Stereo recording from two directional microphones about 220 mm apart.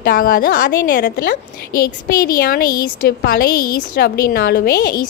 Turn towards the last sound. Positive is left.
turn(degrees=45)  # may be behind; listen again after turning